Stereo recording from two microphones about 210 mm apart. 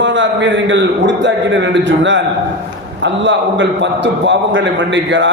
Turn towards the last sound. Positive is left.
turn(degrees=-60)  # may be behind; listen again after turning